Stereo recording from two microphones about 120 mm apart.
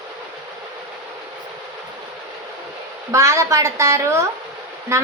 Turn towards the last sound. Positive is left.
turn(degrees=-25)  # may be behind; listen again after turning